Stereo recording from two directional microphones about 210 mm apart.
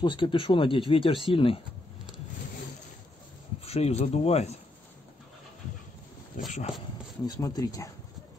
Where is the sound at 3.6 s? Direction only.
30° left (ahead or behind).